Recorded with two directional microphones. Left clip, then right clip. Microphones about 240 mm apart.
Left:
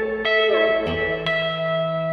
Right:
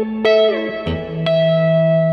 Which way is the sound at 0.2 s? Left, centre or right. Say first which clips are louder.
Right 5 dB; right.